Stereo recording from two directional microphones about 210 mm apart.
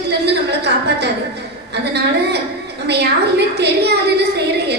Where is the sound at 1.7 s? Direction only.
55° right (ahead or behind).